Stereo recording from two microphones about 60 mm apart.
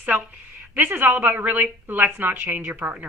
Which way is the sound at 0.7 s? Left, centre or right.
Right.